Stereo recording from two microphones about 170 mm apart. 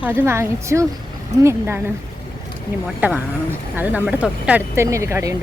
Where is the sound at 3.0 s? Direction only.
10° right (ahead or behind).